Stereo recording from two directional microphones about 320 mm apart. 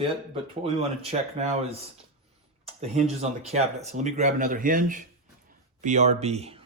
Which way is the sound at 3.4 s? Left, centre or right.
Centre.